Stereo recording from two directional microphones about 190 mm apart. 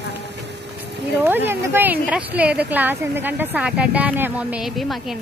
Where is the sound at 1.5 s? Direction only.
10° right (ahead or behind).